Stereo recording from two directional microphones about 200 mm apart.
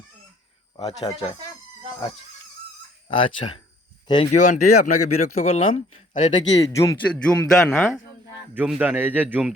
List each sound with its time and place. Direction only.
1.1 s speech: 20° left (ahead or behind)
3.1 s speech: 25° left (ahead or behind)
4.3 s speech: 35° left (ahead or behind)
4.6 s speech: 90° left
5.4 s speech: 35° left (ahead or behind)
6.7 s a man's voice: 15° left (ahead or behind)
7.1 s a man's voice: 5° left (ahead or behind)
8.5 s a man's voice: 10° right (ahead or behind)